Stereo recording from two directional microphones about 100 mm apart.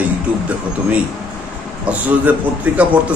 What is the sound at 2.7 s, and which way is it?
Speech, 15° right (ahead or behind).